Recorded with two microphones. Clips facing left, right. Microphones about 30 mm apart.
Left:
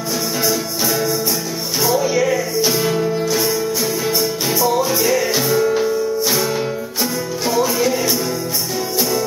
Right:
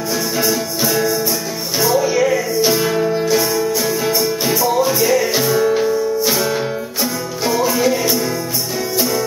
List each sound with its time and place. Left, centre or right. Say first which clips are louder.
0.4 s music: right 2 dB; centre